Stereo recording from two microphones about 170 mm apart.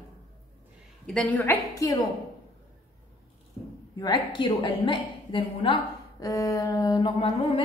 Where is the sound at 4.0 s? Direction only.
25° left (ahead or behind).